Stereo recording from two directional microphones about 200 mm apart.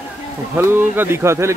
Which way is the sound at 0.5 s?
10° right (ahead or behind).